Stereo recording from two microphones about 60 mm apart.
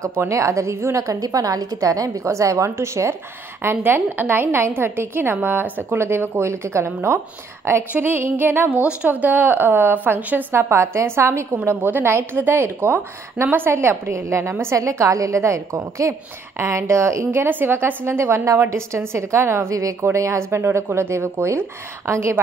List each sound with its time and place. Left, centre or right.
0.3 s a woman's voice: right
2.0 s a woman's voice: right
3.6 s a woman's voice: right
11.6 s a woman's voice: right
14.5 s a woman's voice: right
14.8 s a woman's voice: right
19.7 s a woman's voice: right
20.0 s a woman's voice: right